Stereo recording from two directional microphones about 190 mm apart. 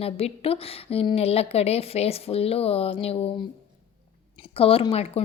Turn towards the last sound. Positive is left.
turn(degrees=30)  # may be behind; listen again after turning